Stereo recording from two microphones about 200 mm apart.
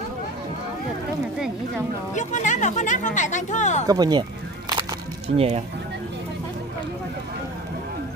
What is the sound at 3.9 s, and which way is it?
Single-lens reflex camera, 20° right (ahead or behind).